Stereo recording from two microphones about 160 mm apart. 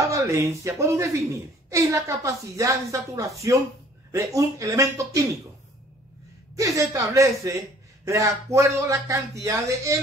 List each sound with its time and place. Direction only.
0.0 s a woman's voice: 20° right (ahead or behind)
6.5 s a woman's voice: 20° right (ahead or behind)